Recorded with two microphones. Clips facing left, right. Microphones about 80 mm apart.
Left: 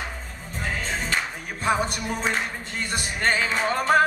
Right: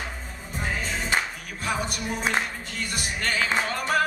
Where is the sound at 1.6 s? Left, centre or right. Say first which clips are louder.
Left 5 dB; left.